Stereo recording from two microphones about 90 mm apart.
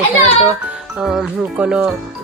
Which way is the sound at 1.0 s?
Centre (ahead or behind).